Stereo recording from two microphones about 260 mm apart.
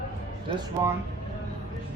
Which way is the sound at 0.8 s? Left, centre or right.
Centre.